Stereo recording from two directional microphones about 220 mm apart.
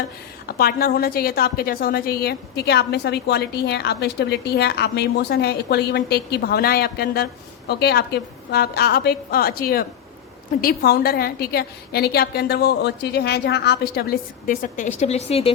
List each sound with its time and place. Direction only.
0.4 s a woman's voice: 45° left (ahead or behind); by 15.5 s 25° left (ahead or behind)